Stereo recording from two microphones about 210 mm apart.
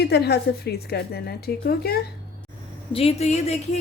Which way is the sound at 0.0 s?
50° left (ahead or behind).